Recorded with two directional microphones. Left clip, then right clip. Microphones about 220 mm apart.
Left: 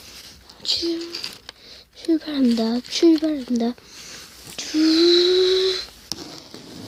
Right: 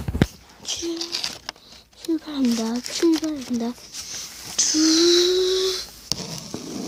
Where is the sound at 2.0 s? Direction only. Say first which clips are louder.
Left 4 dB; 25° left (ahead or behind).